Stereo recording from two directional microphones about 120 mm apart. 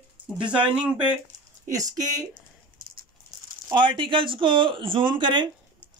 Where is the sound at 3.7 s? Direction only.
40° right (ahead or behind).